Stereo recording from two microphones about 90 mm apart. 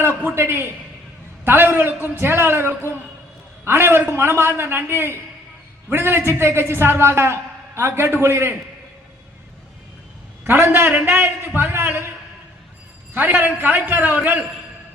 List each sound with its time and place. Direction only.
0.0 s a sound: 25° right (ahead or behind)
1.5 s a man's voice: 25° right (ahead or behind)
10.4 s a man's voice: 25° right (ahead or behind)
13.1 s a man's voice: 20° right (ahead or behind)